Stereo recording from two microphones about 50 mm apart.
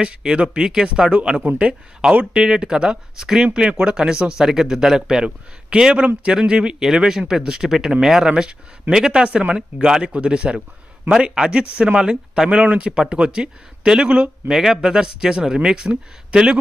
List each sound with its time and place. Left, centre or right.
0.0 s speech: centre